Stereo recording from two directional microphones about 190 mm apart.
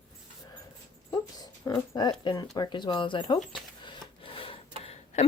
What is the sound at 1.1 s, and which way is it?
Speech, 20° left (ahead or behind).